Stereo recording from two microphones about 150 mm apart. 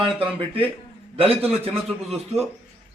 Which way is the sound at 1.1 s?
40° right (ahead or behind).